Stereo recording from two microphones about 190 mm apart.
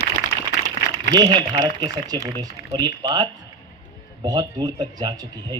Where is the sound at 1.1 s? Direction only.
20° right (ahead or behind).